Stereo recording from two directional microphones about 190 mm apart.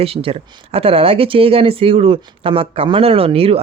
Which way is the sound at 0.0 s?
30° right (ahead or behind).